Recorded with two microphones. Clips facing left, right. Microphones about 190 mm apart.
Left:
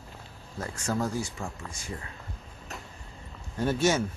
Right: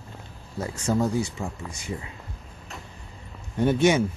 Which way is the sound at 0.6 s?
20° right (ahead or behind).